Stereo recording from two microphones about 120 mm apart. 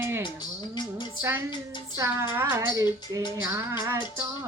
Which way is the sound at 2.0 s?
25° right (ahead or behind).